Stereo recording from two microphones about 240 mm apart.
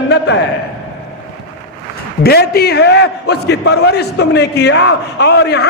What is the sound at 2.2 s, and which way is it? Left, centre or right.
A man's voice, left.